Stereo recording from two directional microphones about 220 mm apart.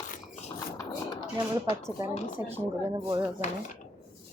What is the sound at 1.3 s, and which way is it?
A woman's voice, 15° right (ahead or behind).